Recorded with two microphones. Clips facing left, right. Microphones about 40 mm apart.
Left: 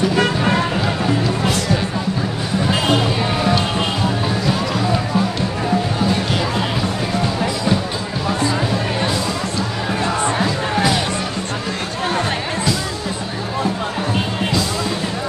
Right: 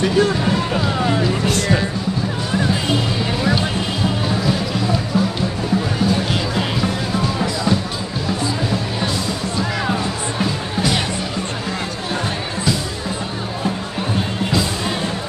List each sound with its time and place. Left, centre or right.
0.2 s run: left